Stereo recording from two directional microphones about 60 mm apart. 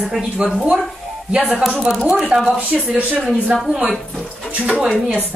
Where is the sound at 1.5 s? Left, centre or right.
Centre.